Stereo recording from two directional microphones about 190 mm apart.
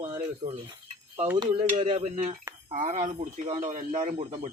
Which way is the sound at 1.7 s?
35° right (ahead or behind).